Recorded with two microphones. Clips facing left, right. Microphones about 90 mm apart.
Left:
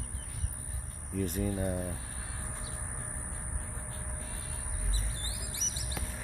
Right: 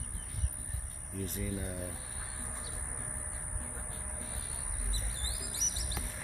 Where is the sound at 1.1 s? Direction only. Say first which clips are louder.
Left 6 dB; 70° left (ahead or behind).